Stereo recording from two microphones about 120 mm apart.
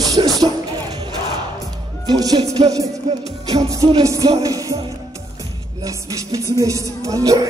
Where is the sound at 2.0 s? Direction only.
35° right (ahead or behind).